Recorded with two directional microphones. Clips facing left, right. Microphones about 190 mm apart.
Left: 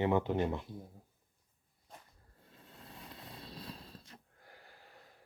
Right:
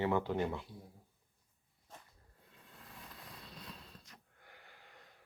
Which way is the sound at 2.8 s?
25° left (ahead or behind).